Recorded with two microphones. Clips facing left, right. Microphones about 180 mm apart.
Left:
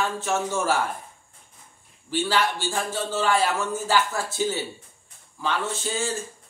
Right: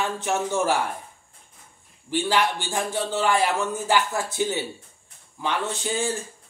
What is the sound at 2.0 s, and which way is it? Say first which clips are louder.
A man's voice: right 1 dB; 15° right (ahead or behind).